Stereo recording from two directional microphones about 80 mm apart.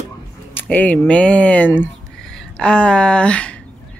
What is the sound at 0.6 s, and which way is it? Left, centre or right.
Speech, centre.